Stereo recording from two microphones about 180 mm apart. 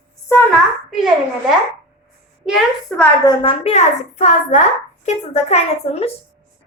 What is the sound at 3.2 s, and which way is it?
A woman's voice, 30° left (ahead or behind).